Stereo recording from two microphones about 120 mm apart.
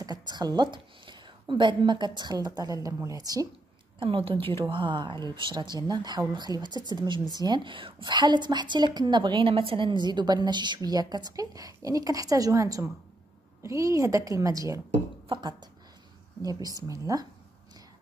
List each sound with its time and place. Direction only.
0.3 s a woman's voice: 35° right (ahead or behind)
4.0 s a woman's voice: 50° right (ahead or behind); by 14.8 s 30° right (ahead or behind)
15.2 s a woman's voice: 40° right (ahead or behind)